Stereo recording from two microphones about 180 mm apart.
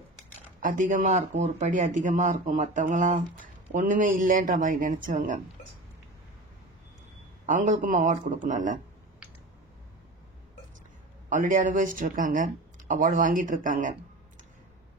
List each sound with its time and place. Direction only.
0.6 s speech: 45° right (ahead or behind)
7.4 s speech: 45° right (ahead or behind)
11.2 s speech: 45° right (ahead or behind)